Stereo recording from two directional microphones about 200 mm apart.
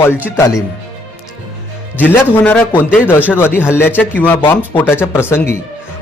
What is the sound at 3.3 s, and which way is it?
Speech, 10° left (ahead or behind).